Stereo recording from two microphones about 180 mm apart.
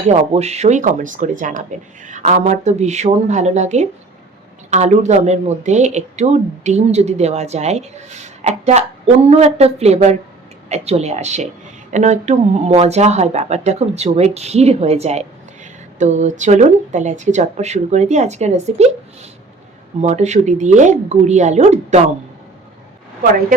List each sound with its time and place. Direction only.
0.1 s speech: 35° right (ahead or behind)